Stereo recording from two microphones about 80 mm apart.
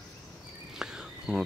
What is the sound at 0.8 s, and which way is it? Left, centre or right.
Cricket, centre.